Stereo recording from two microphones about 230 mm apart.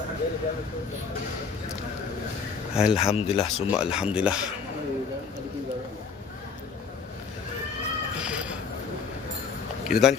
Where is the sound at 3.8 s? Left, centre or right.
Centre.